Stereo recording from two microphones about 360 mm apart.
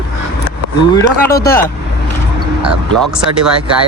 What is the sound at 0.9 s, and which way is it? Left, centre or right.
Speech, centre.